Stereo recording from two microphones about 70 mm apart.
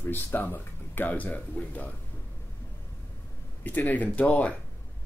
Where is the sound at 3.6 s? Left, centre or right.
Left.